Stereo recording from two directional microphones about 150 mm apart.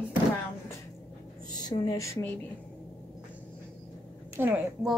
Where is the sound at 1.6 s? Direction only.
25° left (ahead or behind).